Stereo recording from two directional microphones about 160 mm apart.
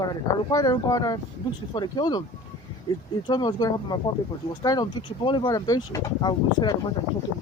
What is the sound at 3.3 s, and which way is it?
Speech, 25° left (ahead or behind).